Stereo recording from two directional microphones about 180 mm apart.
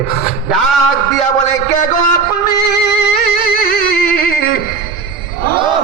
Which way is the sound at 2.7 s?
65° left (ahead or behind).